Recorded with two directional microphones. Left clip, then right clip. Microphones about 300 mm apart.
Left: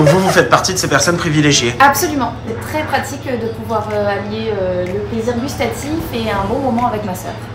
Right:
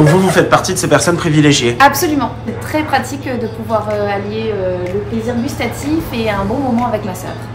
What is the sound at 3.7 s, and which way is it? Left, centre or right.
Speech, centre.